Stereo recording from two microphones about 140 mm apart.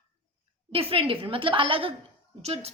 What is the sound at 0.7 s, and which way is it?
A woman's voice, 45° right (ahead or behind).